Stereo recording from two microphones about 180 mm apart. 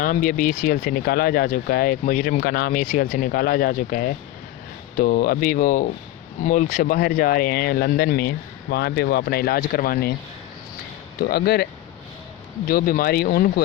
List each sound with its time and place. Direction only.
0.0 s speech: 50° left (ahead or behind)
11.2 s speech: 60° left (ahead or behind)